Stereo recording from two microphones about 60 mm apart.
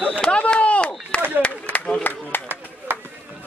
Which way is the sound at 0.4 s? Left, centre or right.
Left.